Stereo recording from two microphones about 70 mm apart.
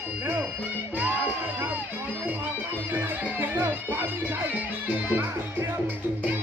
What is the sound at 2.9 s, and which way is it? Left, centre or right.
Speech, right.